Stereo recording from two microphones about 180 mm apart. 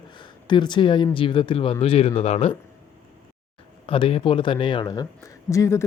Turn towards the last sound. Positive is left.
turn(degrees=15)  # may be behind; listen again after turning